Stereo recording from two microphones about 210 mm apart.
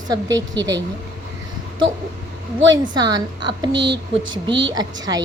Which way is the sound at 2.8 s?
20° right (ahead or behind).